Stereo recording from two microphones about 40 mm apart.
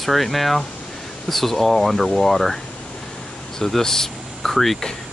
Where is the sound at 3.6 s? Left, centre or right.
Centre.